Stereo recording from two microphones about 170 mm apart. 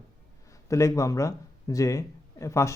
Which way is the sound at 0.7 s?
20° left (ahead or behind).